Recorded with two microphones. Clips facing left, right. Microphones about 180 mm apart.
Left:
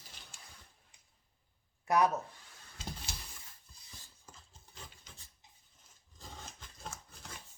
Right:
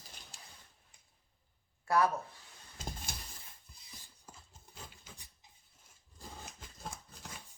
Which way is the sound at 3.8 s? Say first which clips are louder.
Right 1 dB; 10° right (ahead or behind).